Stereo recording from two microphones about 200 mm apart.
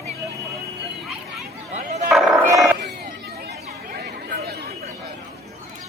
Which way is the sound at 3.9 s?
50° right (ahead or behind).